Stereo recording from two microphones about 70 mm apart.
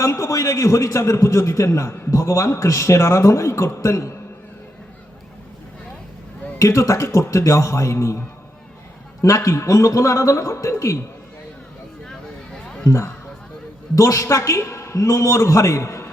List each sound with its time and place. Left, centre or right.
0.0 s a man's voice: left
6.6 s a man's voice: left
9.2 s a man's voice: left
12.8 s a man's voice: left